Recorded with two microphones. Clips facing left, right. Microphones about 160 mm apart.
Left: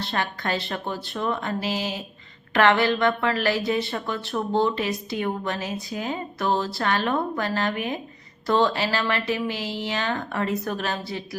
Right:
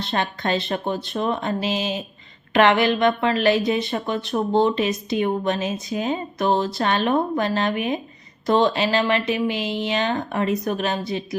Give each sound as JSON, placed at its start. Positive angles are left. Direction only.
{"t": 0.0, "sound": "speech", "side_deg": -20}